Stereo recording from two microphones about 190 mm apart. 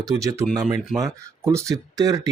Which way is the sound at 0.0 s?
15° right (ahead or behind).